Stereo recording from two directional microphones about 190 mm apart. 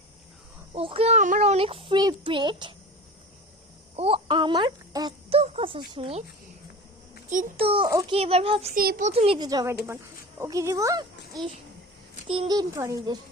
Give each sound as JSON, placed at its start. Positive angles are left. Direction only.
{"t": 0.7, "sound": "speech", "side_deg": -30}
{"t": 3.9, "sound": "speech", "side_deg": -30}
{"t": 7.5, "sound": "a child's voice", "side_deg": -30}
{"t": 8.7, "sound": "a child's voice", "side_deg": -50}
{"t": 9.0, "sound": "a child's voice", "side_deg": -30}